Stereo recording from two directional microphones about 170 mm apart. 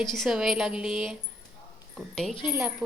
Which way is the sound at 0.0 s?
Centre (ahead or behind).